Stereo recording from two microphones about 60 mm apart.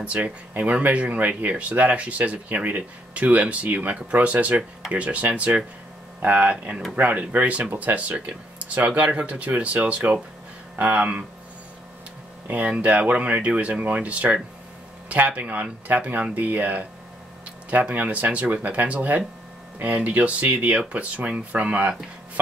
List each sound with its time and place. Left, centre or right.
0.0 s speech: right
12.4 s speech: right